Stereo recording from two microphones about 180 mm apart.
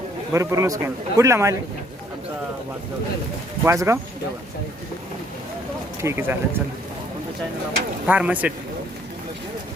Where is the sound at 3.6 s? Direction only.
15° right (ahead or behind).